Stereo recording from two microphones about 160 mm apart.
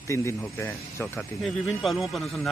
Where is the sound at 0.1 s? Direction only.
15° left (ahead or behind).